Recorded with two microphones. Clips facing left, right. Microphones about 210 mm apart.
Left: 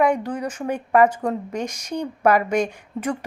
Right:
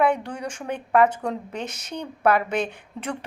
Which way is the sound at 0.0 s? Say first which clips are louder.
Left 2 dB; 10° left (ahead or behind).